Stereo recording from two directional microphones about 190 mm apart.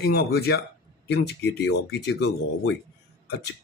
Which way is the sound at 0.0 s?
55° left (ahead or behind).